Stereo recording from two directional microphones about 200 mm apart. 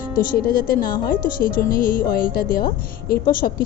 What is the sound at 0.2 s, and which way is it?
Speech, 45° left (ahead or behind).